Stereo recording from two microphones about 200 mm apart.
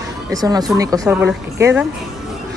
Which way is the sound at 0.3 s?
20° right (ahead or behind).